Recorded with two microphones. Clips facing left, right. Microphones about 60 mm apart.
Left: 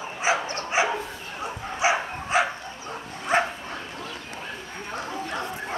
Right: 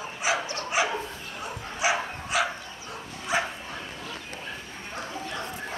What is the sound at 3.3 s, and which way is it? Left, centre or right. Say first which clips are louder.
Dog: left 5 dB; left.